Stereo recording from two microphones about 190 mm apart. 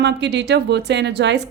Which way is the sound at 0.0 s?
65° right (ahead or behind).